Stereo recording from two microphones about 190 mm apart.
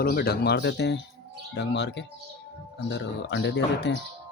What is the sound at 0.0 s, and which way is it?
Speech, 55° left (ahead or behind).